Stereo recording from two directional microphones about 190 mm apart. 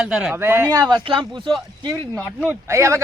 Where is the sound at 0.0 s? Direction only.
5° right (ahead or behind).